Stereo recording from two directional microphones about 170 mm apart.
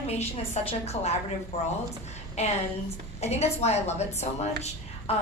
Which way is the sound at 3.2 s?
40° left (ahead or behind).